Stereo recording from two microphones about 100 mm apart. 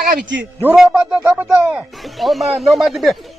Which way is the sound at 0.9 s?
15° right (ahead or behind).